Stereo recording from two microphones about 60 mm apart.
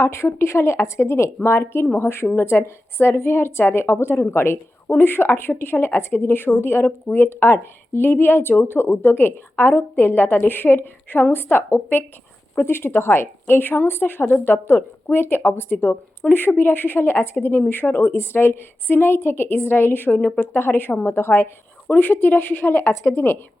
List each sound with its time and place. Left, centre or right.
0.0 s a woman's voice: left
16.2 s speech: centre
16.6 s speech: left